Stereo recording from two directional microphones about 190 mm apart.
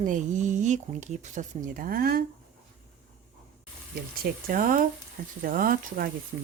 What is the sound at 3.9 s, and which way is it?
Speech, 50° right (ahead or behind).